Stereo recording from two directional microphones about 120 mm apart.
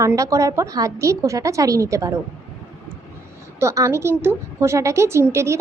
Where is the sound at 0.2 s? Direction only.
25° right (ahead or behind).